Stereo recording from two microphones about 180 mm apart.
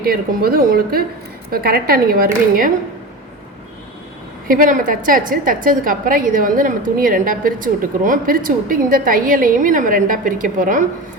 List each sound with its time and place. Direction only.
0.0 s speech: 55° right (ahead or behind)
4.4 s a woman's voice: 50° right (ahead or behind)